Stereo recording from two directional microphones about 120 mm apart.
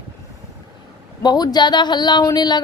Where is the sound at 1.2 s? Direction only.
35° left (ahead or behind).